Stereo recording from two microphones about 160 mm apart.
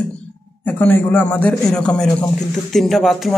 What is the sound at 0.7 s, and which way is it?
Speech, 10° left (ahead or behind).